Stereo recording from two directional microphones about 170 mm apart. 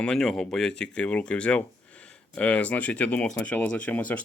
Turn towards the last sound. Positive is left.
turn(degrees=10)  # may be behind; listen again after turning